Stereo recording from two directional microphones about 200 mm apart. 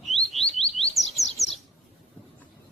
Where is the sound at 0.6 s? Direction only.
30° left (ahead or behind).